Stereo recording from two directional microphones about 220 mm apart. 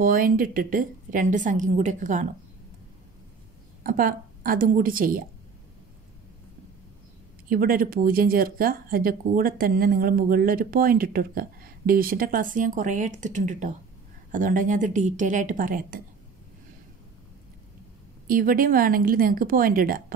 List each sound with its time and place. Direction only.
0.0 s speech: 40° right (ahead or behind)
3.8 s speech: 40° right (ahead or behind)
7.4 s speech: 40° right (ahead or behind)
18.2 s speech: 40° right (ahead or behind)